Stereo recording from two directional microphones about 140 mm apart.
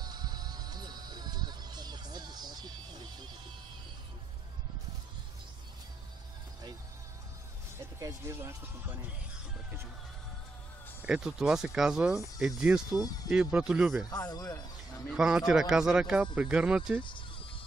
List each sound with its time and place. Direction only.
0.0 s music: 30° right (ahead or behind)
8.0 s speech: 20° right (ahead or behind)
11.1 s speech: 5° right (ahead or behind)
14.0 s speech: 30° left (ahead or behind)
15.0 s speech: 5° right (ahead or behind)